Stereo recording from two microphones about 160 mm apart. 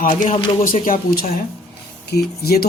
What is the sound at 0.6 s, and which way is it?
Speech, 60° left (ahead or behind).